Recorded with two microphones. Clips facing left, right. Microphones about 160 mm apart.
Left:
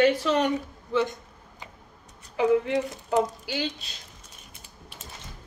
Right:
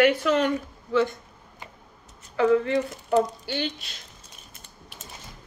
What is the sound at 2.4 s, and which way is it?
Speech, 15° left (ahead or behind).